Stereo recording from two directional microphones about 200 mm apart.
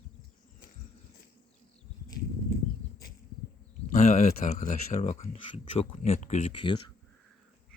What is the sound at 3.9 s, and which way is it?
Speech, 35° left (ahead or behind).